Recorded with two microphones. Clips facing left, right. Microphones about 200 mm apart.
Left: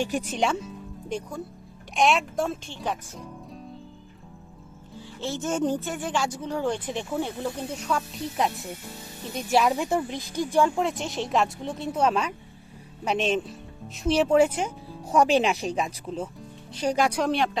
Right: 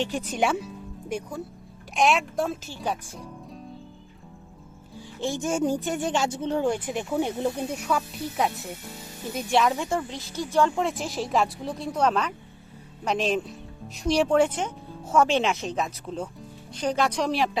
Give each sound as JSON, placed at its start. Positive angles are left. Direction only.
{"t": 0.0, "sound": "speech", "side_deg": 10}
{"t": 0.3, "sound": "speech", "side_deg": -5}
{"t": 4.9, "sound": "speech", "side_deg": -15}
{"t": 6.7, "sound": "speech", "side_deg": -10}
{"t": 7.8, "sound": "speech", "side_deg": -5}
{"t": 9.6, "sound": "speech", "side_deg": 10}